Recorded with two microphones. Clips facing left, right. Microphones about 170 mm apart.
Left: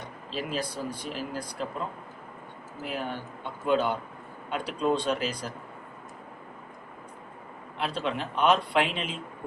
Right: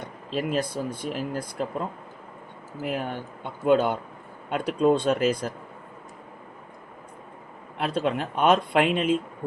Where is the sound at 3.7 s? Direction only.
50° right (ahead or behind).